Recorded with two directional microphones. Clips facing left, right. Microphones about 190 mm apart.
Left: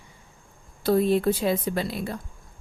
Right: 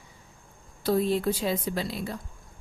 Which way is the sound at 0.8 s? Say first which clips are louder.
Left 4 dB; 60° left (ahead or behind).